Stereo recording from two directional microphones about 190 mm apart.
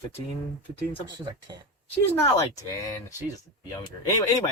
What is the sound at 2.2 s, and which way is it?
Speech, 15° left (ahead or behind).